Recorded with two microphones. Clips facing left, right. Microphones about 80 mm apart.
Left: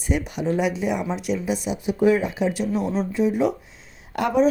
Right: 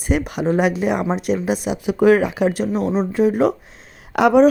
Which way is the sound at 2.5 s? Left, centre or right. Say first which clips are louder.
Right 4 dB; right.